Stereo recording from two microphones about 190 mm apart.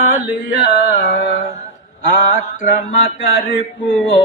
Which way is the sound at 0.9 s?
70° left (ahead or behind).